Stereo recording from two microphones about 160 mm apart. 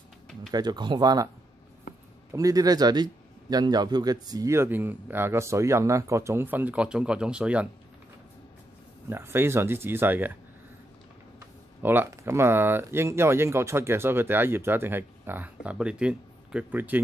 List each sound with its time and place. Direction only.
0.5 s speech: 25° right (ahead or behind)
2.3 s speech: 20° right (ahead or behind); by 7.6 s 5° right (ahead or behind)
9.1 s speech: 15° right (ahead or behind)
11.8 s speech: 15° right (ahead or behind)